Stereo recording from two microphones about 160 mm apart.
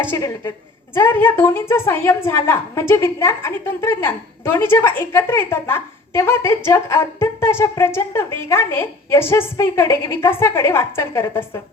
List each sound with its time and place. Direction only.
0.1 s a woman's voice: 15° left (ahead or behind)